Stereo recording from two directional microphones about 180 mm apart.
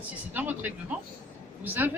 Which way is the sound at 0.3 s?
10° right (ahead or behind).